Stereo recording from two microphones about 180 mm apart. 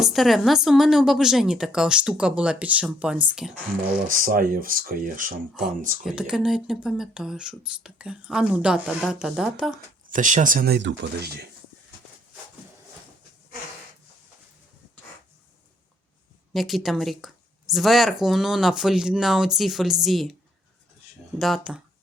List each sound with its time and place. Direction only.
0.0 s speech: centre (ahead or behind)
4.1 s speech: 50° right (ahead or behind)
6.0 s speech: 5° right (ahead or behind)
10.1 s speech: 45° right (ahead or behind)
10.8 s speech: 70° right (ahead or behind)
16.5 s speech: centre (ahead or behind)
21.3 s speech: centre (ahead or behind)